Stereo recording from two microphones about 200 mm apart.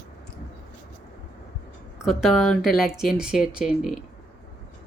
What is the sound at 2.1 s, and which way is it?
Speech, centre (ahead or behind).